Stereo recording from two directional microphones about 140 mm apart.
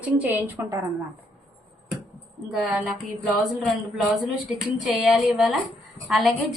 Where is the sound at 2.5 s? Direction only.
5° right (ahead or behind).